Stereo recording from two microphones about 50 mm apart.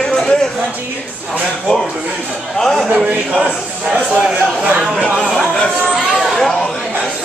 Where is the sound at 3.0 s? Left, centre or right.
Centre.